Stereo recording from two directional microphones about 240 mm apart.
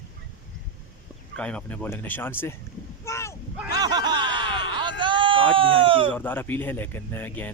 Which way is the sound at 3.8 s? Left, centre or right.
Centre.